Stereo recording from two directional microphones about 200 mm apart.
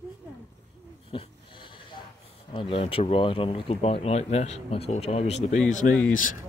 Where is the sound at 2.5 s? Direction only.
25° left (ahead or behind); by 6.4 s 40° left (ahead or behind).